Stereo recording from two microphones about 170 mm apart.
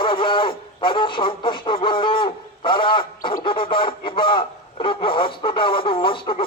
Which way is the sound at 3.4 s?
30° left (ahead or behind).